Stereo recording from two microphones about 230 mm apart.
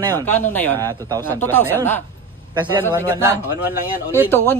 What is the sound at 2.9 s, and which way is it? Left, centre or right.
A man's voice, centre.